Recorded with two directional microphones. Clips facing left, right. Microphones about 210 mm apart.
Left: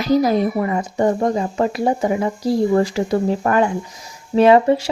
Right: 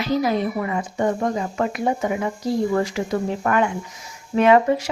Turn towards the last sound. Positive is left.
turn(degrees=30)  # may be behind; listen again after turning